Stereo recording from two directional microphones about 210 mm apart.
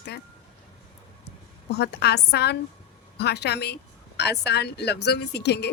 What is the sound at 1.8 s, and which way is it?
Speech, 50° left (ahead or behind).